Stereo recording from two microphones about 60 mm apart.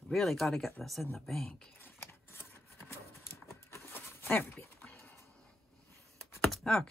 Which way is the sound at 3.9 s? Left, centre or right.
Left.